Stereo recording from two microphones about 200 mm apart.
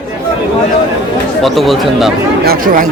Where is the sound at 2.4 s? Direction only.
45° right (ahead or behind).